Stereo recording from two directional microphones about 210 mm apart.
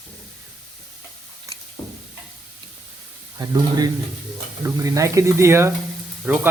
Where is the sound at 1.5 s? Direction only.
15° right (ahead or behind).